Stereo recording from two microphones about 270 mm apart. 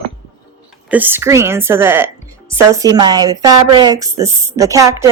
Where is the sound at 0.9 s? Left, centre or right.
Centre.